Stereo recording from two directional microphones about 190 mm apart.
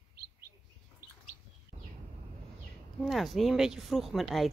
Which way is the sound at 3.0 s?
Centre (ahead or behind).